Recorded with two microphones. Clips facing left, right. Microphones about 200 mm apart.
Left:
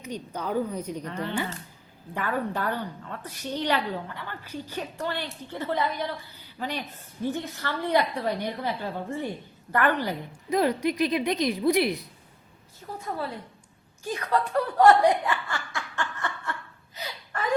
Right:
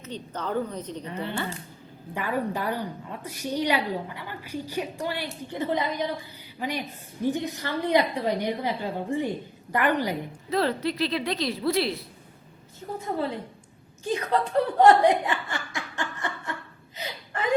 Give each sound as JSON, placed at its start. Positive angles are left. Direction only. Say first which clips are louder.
{"t": 0.0, "sound": "a woman's voice", "louder": "left 1 dB", "side_deg": 10}
{"t": 2.1, "sound": "a woman's voice", "louder": "right 1 dB", "side_deg": -10}
{"t": 10.5, "sound": "a woman's voice", "louder": "left 2 dB", "side_deg": 15}
{"t": 12.8, "sound": "a woman's voice", "louder": "right 4 dB", "side_deg": -30}
{"t": 14.1, "sound": "speech", "louder": "right 1 dB", "side_deg": -25}
{"t": 17.0, "sound": "gasp", "louder": "right 1 dB", "side_deg": -20}